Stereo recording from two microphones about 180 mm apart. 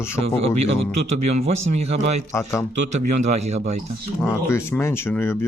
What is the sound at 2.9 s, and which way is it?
Speech, 40° right (ahead or behind).